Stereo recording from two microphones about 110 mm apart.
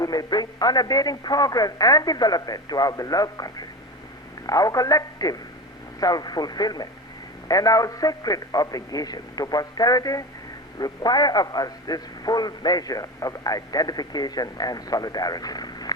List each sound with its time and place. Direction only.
0.0 s a man's voice: 35° left (ahead or behind)